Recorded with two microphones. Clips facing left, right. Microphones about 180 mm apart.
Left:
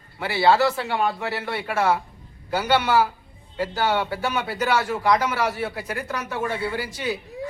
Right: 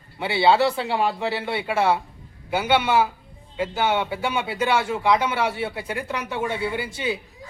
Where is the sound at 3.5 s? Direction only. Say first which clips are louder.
Even; 10° right (ahead or behind).